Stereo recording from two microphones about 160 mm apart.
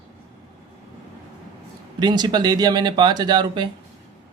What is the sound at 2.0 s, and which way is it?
Speech, 25° right (ahead or behind).